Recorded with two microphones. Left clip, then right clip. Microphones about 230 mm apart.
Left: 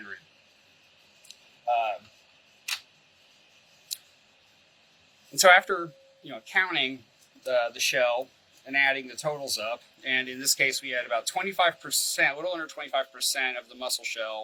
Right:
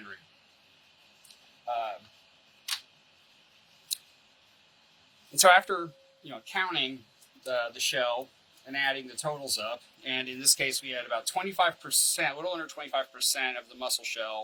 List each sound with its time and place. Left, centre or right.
3.9 s scissors: centre
5.3 s speech: centre